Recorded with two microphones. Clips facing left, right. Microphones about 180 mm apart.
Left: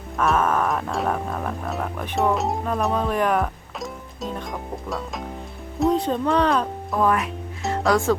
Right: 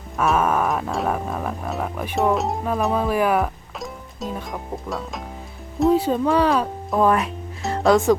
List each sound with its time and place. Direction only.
0.2 s music: 10° right (ahead or behind)
6.9 s speech: 30° right (ahead or behind)